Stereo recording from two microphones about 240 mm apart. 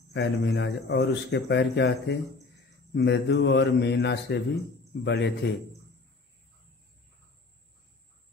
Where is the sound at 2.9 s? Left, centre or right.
Left.